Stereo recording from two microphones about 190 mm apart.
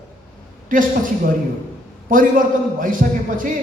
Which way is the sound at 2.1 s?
45° right (ahead or behind).